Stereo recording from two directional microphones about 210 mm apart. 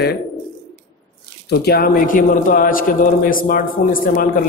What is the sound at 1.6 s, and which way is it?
A man's voice, 45° left (ahead or behind).